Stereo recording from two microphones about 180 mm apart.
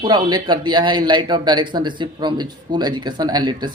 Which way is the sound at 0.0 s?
25° right (ahead or behind).